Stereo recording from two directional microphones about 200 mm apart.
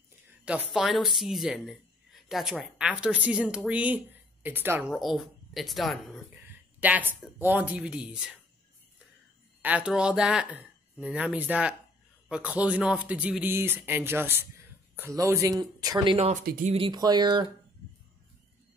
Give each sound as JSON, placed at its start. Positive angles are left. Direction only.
{"t": 0.5, "sound": "speech", "side_deg": -5}
{"t": 6.3, "sound": "a sound", "side_deg": -10}
{"t": 7.3, "sound": "speech", "side_deg": -10}
{"t": 9.6, "sound": "speech", "side_deg": -5}
{"t": 16.4, "sound": "speech", "side_deg": -45}
{"t": 16.7, "sound": "speech", "side_deg": -25}